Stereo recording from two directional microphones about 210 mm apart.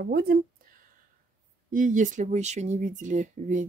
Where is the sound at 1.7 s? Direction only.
40° right (ahead or behind).